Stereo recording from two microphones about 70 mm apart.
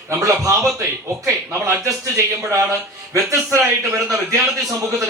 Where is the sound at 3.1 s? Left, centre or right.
Right.